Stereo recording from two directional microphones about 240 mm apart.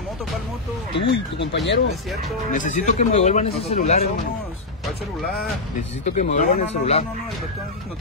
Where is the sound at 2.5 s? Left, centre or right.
Left.